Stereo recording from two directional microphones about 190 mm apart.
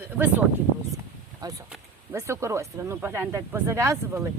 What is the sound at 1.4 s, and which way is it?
Speech, 20° right (ahead or behind).